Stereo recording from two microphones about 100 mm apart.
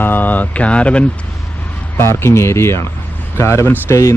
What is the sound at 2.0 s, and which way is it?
Speech, 25° left (ahead or behind).